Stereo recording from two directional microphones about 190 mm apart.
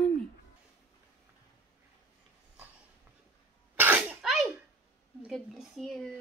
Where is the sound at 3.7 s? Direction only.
10° right (ahead or behind).